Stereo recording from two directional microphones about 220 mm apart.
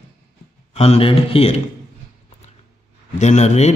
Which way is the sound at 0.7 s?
25° left (ahead or behind).